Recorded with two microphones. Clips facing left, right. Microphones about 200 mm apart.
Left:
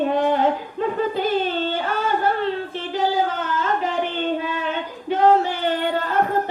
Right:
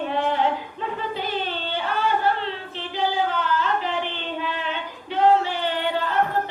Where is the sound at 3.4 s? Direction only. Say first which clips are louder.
Left 1 dB; 45° left (ahead or behind).